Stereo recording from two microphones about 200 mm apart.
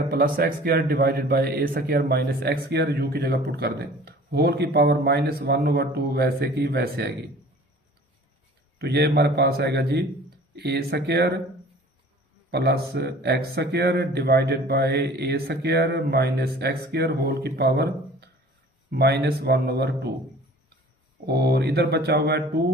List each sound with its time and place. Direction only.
0.1 s speech: 50° right (ahead or behind)
8.8 s speech: 55° right (ahead or behind)
12.5 s speech: 55° right (ahead or behind)
21.2 s speech: 55° right (ahead or behind)